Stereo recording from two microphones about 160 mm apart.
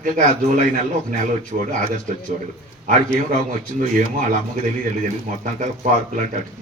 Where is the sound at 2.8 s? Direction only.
55° right (ahead or behind).